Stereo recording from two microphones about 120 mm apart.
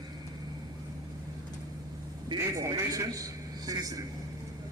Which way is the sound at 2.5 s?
25° right (ahead or behind).